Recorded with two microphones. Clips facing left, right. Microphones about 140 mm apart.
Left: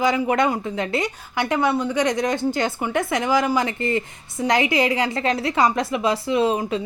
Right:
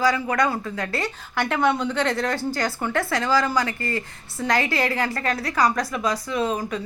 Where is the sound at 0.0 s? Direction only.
20° left (ahead or behind).